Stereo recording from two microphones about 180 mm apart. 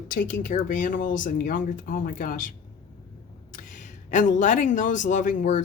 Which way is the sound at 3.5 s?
45° left (ahead or behind).